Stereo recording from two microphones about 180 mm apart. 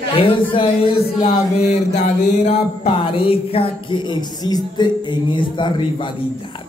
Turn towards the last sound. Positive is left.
turn(degrees=25)  # may be behind; listen again after turning